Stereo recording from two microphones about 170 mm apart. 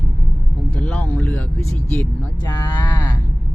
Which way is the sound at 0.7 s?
5° left (ahead or behind).